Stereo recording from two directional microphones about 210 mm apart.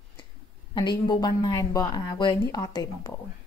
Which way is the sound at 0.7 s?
20° left (ahead or behind).